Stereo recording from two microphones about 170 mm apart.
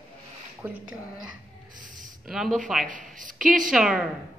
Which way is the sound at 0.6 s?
15° right (ahead or behind).